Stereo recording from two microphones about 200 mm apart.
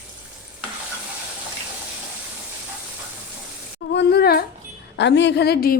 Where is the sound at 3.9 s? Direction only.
55° left (ahead or behind).